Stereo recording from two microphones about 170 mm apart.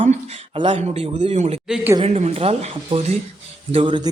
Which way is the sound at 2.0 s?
40° right (ahead or behind).